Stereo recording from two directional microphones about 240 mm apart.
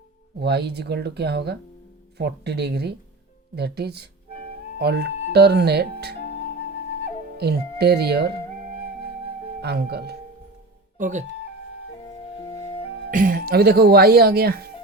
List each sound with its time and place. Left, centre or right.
0.3 s speech: right
6.2 s flute: left
7.3 s speech: right
9.6 s speech: right
10.9 s speech: right
12.4 s flute: centre
13.1 s speech: right